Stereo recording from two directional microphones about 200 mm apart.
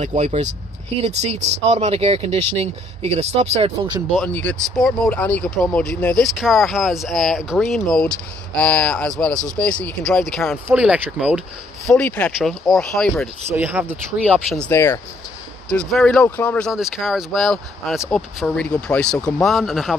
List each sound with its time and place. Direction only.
0.0 s speech: 35° right (ahead or behind)
4.1 s speech: 5° left (ahead or behind)
11.9 s speech: 5° left (ahead or behind)
13.5 s speech: 10° right (ahead or behind)
14.6 s speech: 10° left (ahead or behind)